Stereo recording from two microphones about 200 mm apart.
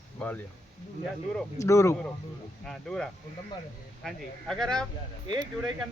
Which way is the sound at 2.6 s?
Centre (ahead or behind).